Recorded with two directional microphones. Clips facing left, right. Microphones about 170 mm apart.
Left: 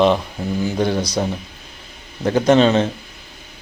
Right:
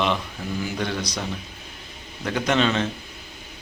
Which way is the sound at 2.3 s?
35° left (ahead or behind).